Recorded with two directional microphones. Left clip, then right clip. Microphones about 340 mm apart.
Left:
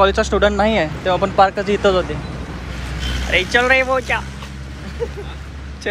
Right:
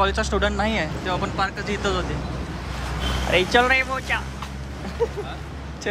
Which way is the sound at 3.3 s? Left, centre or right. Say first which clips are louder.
Left 4 dB; centre.